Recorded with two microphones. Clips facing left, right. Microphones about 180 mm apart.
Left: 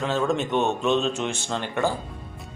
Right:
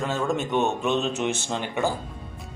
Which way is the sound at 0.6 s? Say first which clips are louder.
Left 1 dB; 15° right (ahead or behind).